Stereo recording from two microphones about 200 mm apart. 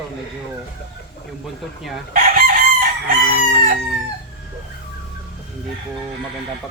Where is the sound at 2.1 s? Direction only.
45° right (ahead or behind).